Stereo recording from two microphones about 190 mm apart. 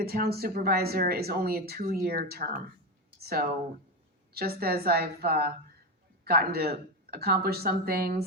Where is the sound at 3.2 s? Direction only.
55° right (ahead or behind).